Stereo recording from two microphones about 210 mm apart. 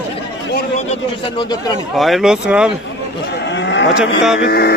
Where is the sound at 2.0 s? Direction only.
Centre (ahead or behind).